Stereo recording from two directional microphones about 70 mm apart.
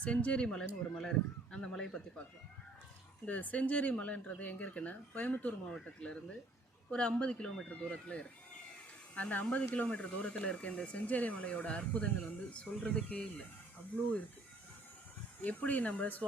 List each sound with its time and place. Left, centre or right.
0.0 s speech: centre
3.2 s speech: left
15.4 s speech: left